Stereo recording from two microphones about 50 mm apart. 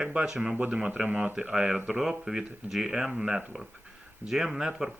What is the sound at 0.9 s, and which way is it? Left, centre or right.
Speech, right.